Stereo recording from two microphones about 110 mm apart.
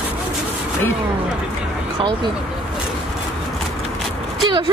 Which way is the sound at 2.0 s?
45° right (ahead or behind).